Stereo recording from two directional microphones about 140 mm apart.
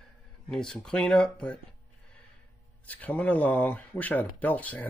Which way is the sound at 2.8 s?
10° left (ahead or behind).